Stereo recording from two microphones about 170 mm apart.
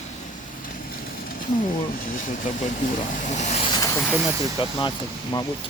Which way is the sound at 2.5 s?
50° left (ahead or behind).